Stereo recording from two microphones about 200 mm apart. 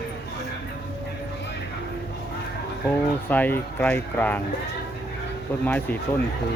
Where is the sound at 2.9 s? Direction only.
10° left (ahead or behind).